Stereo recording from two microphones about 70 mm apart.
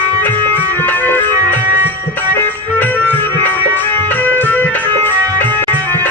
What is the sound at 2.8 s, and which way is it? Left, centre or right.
Music, left.